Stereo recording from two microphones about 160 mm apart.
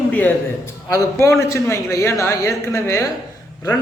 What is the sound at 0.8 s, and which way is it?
A man's voice, 20° left (ahead or behind).